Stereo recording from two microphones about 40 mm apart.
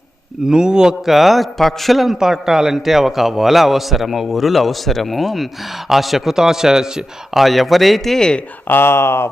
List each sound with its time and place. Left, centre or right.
0.4 s a man's voice: centre
1.0 s a man's voice: centre
2.1 s a man's voice: centre
7.3 s a man's voice: centre
8.6 s speech: left